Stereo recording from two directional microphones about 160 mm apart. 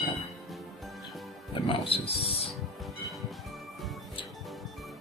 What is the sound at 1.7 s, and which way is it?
Music, 35° left (ahead or behind).